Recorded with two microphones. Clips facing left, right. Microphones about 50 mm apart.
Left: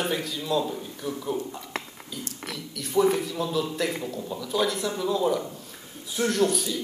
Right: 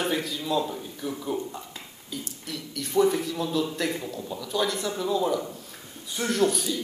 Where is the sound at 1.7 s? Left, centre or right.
Left.